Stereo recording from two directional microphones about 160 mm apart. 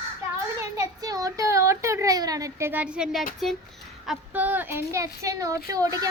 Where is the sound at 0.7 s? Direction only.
25° right (ahead or behind); by 3.2 s 5° right (ahead or behind).